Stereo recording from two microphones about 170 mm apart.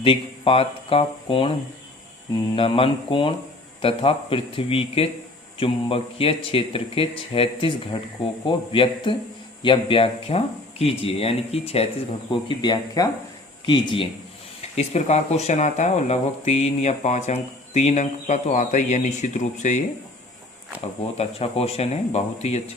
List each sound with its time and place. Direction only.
0.0 s speech: 30° left (ahead or behind)
14.8 s speech: 40° left (ahead or behind)
21.2 s speech: 35° left (ahead or behind)